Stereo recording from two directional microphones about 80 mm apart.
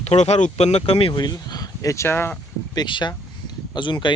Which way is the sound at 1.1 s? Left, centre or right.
Left.